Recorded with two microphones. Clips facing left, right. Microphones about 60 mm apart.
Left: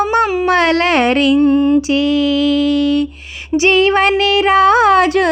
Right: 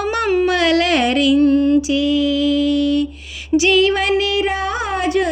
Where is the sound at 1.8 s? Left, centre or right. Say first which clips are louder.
Left 3 dB; left.